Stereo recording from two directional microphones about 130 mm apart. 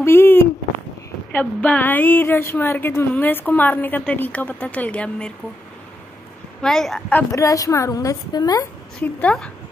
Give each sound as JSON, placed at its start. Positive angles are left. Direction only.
{"t": 0.0, "sound": "a sound", "side_deg": 15}
{"t": 1.3, "sound": "speech", "side_deg": 10}
{"t": 6.6, "sound": "a child's voice", "side_deg": 5}
{"t": 7.2, "sound": "a woman's voice", "side_deg": 25}
{"t": 9.0, "sound": "speech", "side_deg": 10}